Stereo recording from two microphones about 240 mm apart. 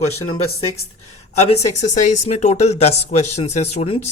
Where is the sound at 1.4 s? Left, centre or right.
Left.